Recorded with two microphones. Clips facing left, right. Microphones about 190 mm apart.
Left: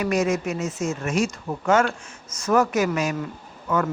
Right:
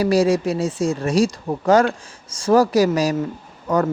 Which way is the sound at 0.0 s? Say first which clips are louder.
Right 6 dB; 35° right (ahead or behind).